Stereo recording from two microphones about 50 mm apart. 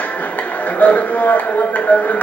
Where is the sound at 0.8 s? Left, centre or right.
Left.